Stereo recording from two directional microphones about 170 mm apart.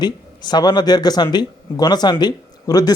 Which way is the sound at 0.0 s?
25° left (ahead or behind).